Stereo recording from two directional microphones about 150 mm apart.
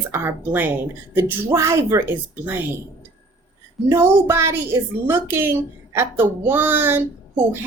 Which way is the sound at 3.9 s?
15° right (ahead or behind).